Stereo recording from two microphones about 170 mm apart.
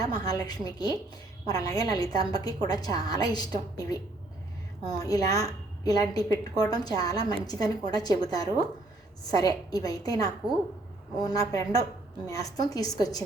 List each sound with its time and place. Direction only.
0.0 s a woman's voice: 20° left (ahead or behind)